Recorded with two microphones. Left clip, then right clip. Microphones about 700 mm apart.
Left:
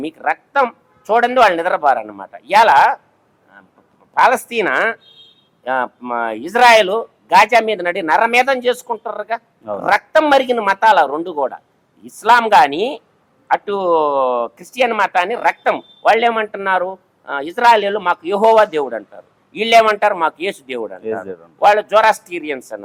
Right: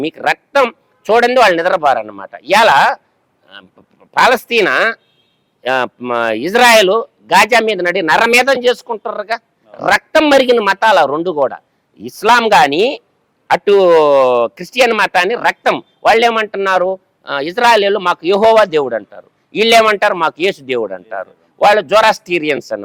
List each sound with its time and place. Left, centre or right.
0.0 s speech: right
4.1 s speech: right